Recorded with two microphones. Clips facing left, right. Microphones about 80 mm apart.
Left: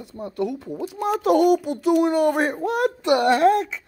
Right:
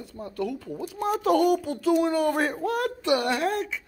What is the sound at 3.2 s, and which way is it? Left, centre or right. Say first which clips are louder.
Speech: left 9 dB; left.